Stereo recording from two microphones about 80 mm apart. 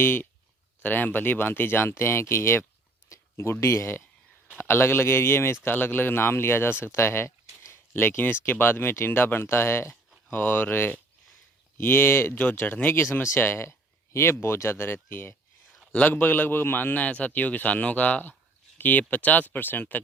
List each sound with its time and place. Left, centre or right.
0.0 s a man's voice: left